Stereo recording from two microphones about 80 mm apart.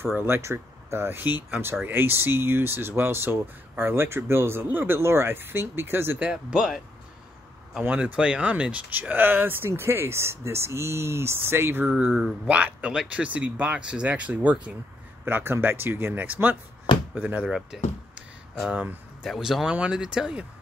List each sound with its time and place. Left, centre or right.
0.0 s speech: right; by 6.8 s centre
7.8 s speech: centre
12.0 s speech: centre
15.2 s speech: right
17.5 s speech: centre
19.2 s speech: centre
19.6 s speech: centre